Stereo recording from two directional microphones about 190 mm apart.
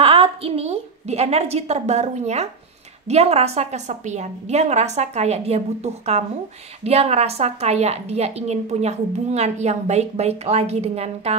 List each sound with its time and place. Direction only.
0.0 s a woman's voice: 30° right (ahead or behind)